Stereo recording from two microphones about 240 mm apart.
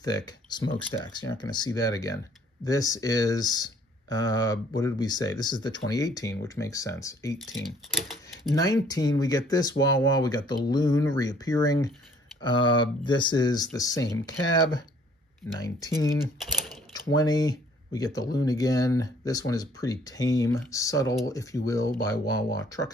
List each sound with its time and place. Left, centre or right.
0.0 s speech: centre
8.8 s speech: centre
16.3 s speech: centre
17.1 s speech: centre